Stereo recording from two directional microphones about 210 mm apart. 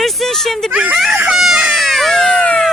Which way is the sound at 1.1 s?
5° right (ahead or behind).